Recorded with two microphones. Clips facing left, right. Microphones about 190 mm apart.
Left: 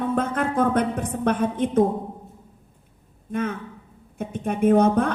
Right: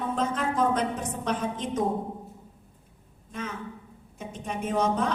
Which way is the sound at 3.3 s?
55° left (ahead or behind).